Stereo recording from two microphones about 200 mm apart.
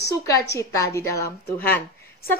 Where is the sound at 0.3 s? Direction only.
15° left (ahead or behind).